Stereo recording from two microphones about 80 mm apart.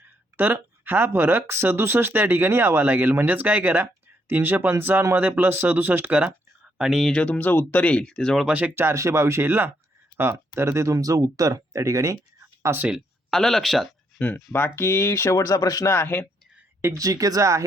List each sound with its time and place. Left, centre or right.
0.0 s speech: right; by 7.0 s centre
7.0 s speech: centre
8.4 s speech: centre
8.7 s speech: right
10.9 s speech: right
13.3 s speech: centre
14.2 s speech: centre
14.8 s speech: left
15.9 s speech: left
16.8 s speech: right